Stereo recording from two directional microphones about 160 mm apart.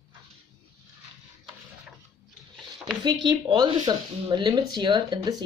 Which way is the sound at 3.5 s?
30° right (ahead or behind).